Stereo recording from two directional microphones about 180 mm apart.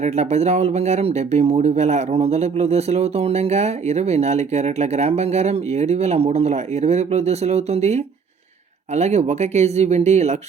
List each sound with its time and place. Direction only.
0.0 s speech: 40° right (ahead or behind)